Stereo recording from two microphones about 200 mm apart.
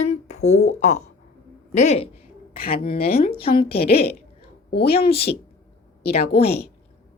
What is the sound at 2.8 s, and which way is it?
Speech, 50° left (ahead or behind).